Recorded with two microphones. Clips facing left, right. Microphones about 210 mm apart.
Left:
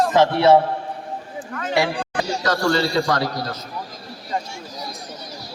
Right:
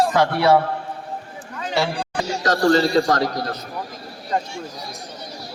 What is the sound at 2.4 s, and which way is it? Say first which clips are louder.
A man's voice: right 4 dB; 40° right (ahead or behind).